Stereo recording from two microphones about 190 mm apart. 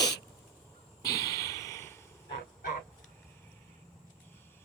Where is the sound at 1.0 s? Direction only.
20° left (ahead or behind).